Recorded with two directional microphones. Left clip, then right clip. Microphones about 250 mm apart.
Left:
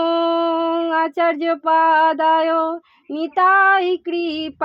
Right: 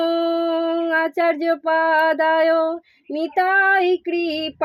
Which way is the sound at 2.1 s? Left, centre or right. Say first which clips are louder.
Even; left.